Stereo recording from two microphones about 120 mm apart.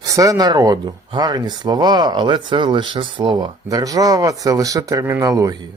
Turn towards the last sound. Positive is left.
turn(degrees=-30)  # may be behind; listen again after turning